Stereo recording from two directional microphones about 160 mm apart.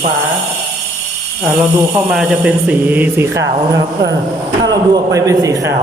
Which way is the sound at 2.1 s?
5° right (ahead or behind).